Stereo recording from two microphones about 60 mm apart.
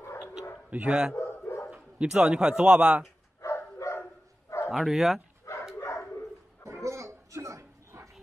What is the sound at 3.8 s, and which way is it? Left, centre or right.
Dog, left.